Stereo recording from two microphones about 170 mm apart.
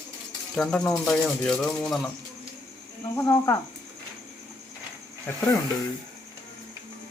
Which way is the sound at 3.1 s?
15° left (ahead or behind).